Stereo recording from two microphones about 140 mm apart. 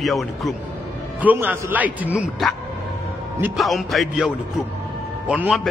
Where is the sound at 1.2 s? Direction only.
10° right (ahead or behind).